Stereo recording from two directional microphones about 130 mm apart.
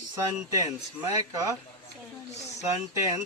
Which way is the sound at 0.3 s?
25° right (ahead or behind).